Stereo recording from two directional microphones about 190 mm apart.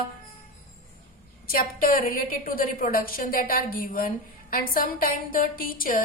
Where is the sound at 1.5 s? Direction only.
50° left (ahead or behind).